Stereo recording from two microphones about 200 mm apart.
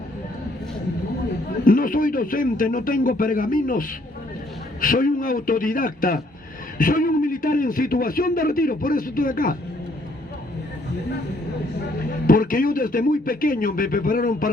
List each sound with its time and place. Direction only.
1.6 s a man's voice: 45° left (ahead or behind)
12.3 s a man's voice: 45° left (ahead or behind)